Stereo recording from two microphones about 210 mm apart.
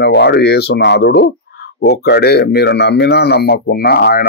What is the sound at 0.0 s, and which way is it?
Speech, 50° left (ahead or behind).